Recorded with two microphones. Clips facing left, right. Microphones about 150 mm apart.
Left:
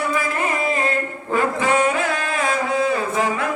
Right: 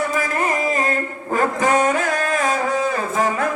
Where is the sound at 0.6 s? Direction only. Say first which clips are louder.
Right 1 dB; 40° right (ahead or behind).